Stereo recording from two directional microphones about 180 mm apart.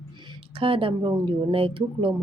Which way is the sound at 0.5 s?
30° right (ahead or behind).